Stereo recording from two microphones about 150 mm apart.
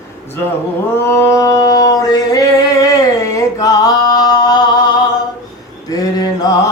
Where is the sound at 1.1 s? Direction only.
15° left (ahead or behind).